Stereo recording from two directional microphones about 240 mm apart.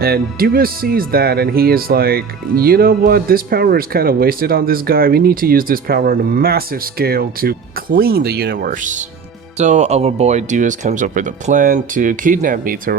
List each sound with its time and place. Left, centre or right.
0.0 s speech: right